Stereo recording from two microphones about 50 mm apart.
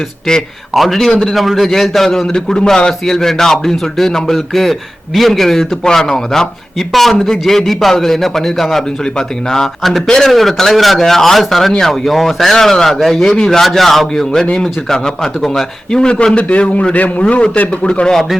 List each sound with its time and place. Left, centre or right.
0.7 s a man's voice: centre
16.0 s a man's voice: centre
18.1 s a man's voice: centre